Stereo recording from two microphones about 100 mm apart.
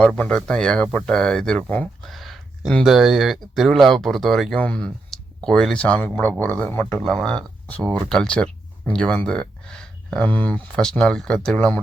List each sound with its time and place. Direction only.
0.2 s speech: 10° left (ahead or behind)
2.0 s a sound: centre (ahead or behind)
2.8 s speech: 5° right (ahead or behind)
4.5 s speech: 10° left (ahead or behind)
7.0 s speech: 5° left (ahead or behind)